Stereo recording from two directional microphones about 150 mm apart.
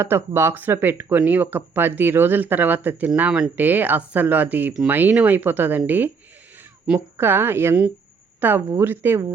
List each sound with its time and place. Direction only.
0.0 s speech: 15° right (ahead or behind)